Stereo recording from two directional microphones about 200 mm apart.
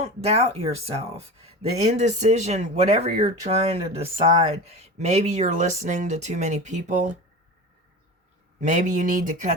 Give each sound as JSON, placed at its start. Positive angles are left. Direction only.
{"t": 0.0, "sound": "speech", "side_deg": -30}
{"t": 8.6, "sound": "speech", "side_deg": -40}